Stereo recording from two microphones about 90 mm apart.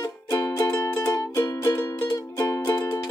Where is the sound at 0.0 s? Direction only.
40° left (ahead or behind).